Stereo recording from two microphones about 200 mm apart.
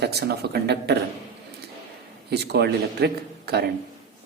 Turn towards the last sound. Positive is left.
turn(degrees=-55)  # may be behind; listen again after turning